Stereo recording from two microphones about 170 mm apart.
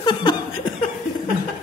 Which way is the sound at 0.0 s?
25° left (ahead or behind).